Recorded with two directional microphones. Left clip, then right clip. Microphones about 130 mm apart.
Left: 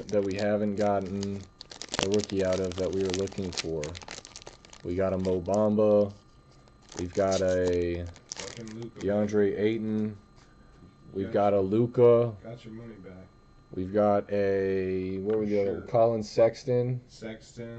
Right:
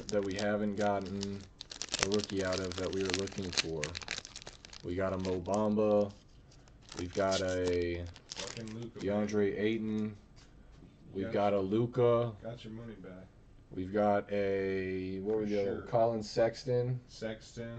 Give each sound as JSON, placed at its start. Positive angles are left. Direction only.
{"t": 0.0, "sound": "speech", "side_deg": 10}
{"t": 0.9, "sound": "crumpling", "side_deg": 5}
{"t": 2.1, "sound": "speech", "side_deg": 10}
{"t": 9.0, "sound": "speech", "side_deg": -5}
{"t": 11.2, "sound": "speech", "side_deg": 0}
{"t": 13.7, "sound": "speech", "side_deg": 5}